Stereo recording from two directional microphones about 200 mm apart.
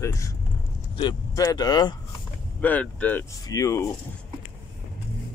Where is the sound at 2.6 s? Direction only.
5° left (ahead or behind).